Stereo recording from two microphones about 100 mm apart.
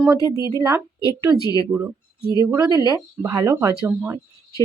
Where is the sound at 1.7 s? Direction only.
25° right (ahead or behind).